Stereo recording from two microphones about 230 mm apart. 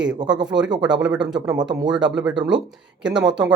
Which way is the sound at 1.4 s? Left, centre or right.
Centre.